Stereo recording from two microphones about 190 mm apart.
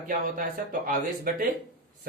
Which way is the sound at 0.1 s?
45° right (ahead or behind).